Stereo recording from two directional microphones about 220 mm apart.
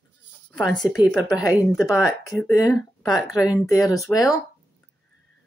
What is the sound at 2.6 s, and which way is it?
Speech, 15° left (ahead or behind).